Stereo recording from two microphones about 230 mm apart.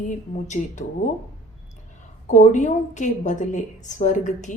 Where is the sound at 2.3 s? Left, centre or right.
Left.